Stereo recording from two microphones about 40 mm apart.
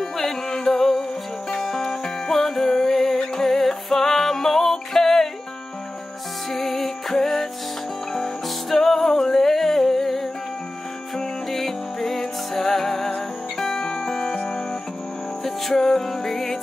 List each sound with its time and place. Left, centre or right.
0.0 s music: centre
6.5 s music: centre
11.5 s music: centre; by 14.6 s left
15.4 s music: centre